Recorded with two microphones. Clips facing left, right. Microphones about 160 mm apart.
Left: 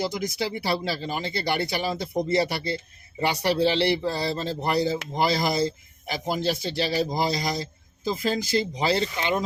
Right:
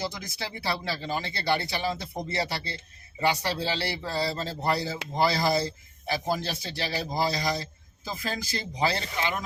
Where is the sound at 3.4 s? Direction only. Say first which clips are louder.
Left 8 dB; 25° left (ahead or behind).